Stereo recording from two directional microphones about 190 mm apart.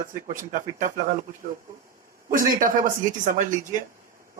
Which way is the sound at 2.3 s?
45° right (ahead or behind).